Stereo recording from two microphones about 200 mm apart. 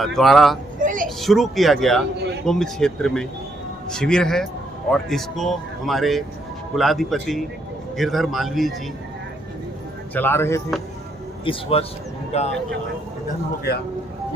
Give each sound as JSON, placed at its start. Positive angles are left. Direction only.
{"t": 0.0, "sound": "speech", "side_deg": 0}
{"t": 0.8, "sound": "a sound", "side_deg": -40}
{"t": 1.2, "sound": "speech", "side_deg": 0}
{"t": 10.2, "sound": "speech", "side_deg": 10}
{"t": 11.4, "sound": "speech", "side_deg": 25}